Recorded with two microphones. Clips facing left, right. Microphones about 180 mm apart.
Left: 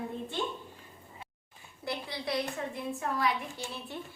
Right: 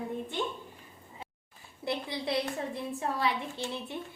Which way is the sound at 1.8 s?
25° right (ahead or behind).